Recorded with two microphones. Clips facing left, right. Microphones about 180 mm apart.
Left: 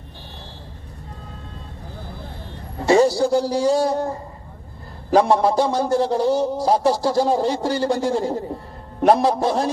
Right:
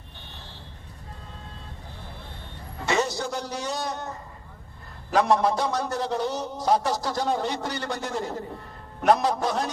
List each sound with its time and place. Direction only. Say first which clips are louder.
2.8 s a man's voice: left 11 dB; 35° left (ahead or behind)